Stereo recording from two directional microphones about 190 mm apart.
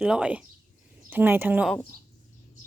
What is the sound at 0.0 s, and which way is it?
Speech, 5° right (ahead or behind).